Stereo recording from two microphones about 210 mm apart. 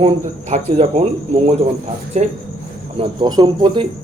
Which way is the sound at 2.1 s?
30° right (ahead or behind).